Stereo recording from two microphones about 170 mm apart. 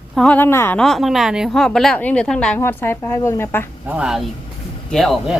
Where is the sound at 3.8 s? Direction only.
5° right (ahead or behind).